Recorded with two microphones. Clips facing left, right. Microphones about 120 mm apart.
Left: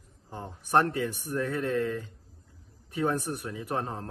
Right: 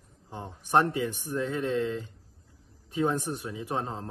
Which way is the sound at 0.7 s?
15° right (ahead or behind).